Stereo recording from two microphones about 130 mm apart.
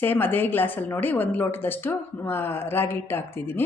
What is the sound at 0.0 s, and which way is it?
Speech, 15° left (ahead or behind).